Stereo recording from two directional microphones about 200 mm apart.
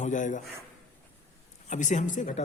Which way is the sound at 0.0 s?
40° left (ahead or behind).